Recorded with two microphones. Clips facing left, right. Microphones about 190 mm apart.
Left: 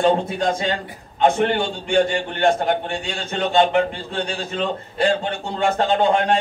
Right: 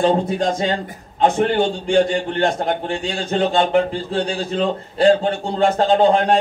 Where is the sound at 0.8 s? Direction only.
35° right (ahead or behind).